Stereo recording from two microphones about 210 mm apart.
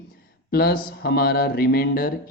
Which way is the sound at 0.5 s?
45° left (ahead or behind).